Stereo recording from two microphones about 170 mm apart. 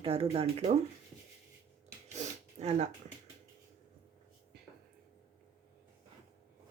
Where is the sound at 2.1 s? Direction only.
40° right (ahead or behind).